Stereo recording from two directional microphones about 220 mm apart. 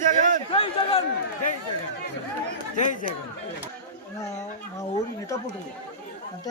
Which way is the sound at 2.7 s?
35° left (ahead or behind).